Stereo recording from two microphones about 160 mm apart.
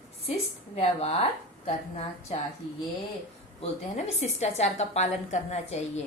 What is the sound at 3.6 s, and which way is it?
A woman's voice, 45° left (ahead or behind).